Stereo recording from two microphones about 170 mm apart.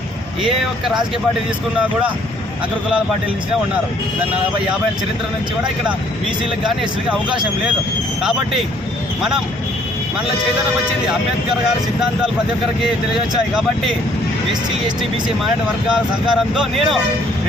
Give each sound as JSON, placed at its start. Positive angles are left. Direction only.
{"t": 0.4, "sound": "speech", "side_deg": 0}
{"t": 6.7, "sound": "speech", "side_deg": -5}
{"t": 15.9, "sound": "speech", "side_deg": -5}